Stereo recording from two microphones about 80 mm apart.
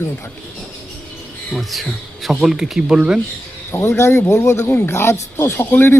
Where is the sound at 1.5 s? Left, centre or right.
Centre.